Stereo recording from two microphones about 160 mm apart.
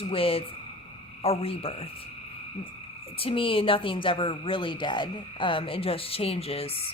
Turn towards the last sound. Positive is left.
turn(degrees=35)  # may be behind; listen again after turning